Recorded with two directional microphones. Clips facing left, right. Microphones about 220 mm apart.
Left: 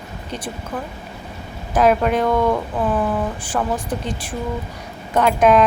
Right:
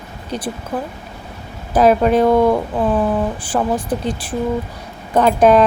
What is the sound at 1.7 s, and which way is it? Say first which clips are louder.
A woman's voice: right 4 dB; 35° right (ahead or behind).